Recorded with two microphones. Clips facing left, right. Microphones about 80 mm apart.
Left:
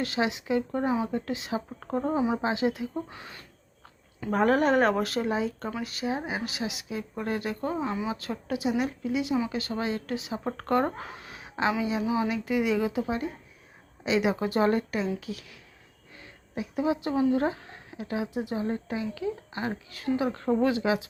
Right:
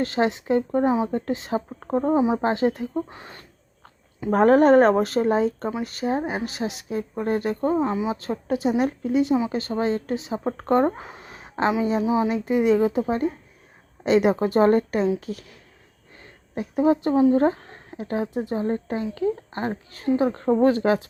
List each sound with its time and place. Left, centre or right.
0.0 s a woman's voice: right
2.0 s speech: right
2.4 s a woman's voice: right
8.2 s a woman's voice: right